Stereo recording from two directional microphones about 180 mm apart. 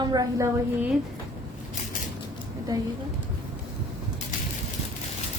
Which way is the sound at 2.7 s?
20° right (ahead or behind).